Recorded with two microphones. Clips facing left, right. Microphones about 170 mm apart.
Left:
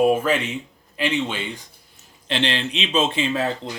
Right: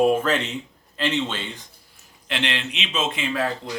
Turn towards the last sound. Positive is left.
turn(degrees=30)  # may be behind; listen again after turning